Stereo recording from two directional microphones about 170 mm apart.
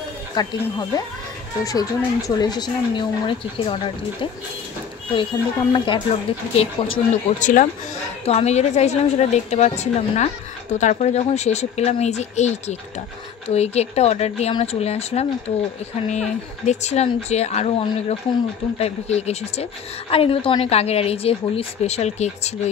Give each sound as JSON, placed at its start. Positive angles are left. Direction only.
{"t": 0.4, "sound": "a woman's voice", "side_deg": 25}
{"t": 7.3, "sound": "a woman's voice", "side_deg": 50}